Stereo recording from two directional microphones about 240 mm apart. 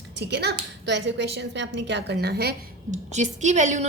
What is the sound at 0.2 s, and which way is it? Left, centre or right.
Speech, right.